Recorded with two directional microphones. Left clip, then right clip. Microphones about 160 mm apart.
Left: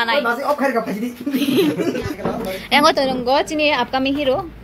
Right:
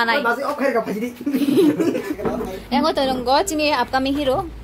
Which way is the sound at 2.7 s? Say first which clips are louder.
Left 5 dB; 5° left (ahead or behind).